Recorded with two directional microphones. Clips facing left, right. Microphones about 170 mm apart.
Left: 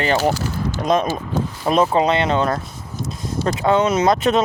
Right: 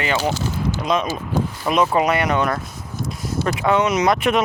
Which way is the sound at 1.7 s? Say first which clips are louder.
Left 2 dB; 30° left (ahead or behind).